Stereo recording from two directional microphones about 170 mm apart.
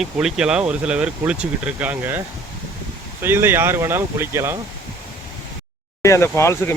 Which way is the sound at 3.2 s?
15° right (ahead or behind).